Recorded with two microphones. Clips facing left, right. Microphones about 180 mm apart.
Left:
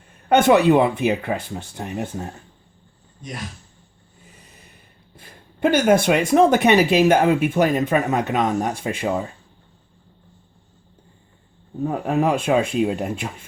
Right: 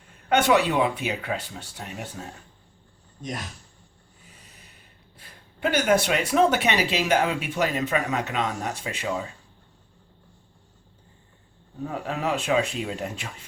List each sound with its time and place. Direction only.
0.3 s speech: 50° left (ahead or behind)
5.2 s speech: 50° left (ahead or behind)
11.9 s speech: 55° left (ahead or behind)